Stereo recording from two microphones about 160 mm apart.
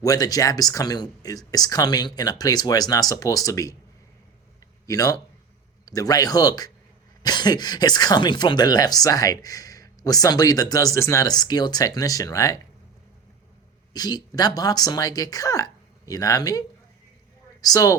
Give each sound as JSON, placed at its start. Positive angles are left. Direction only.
{"t": 0.0, "sound": "speech", "side_deg": 25}
{"t": 4.9, "sound": "speech", "side_deg": 20}
{"t": 13.9, "sound": "speech", "side_deg": 25}